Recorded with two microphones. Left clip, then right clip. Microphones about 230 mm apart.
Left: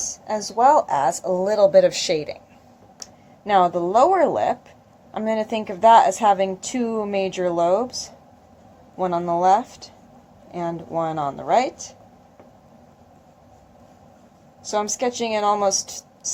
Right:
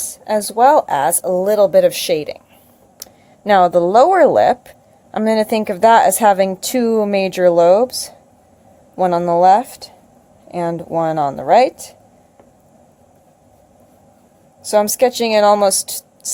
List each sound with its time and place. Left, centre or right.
0.3 s speech: right
3.4 s speech: right
14.7 s speech: right